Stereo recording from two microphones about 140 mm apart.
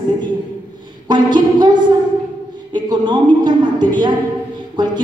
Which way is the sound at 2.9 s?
30° right (ahead or behind).